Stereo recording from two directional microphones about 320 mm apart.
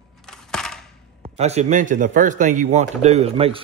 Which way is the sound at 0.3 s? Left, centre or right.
Centre.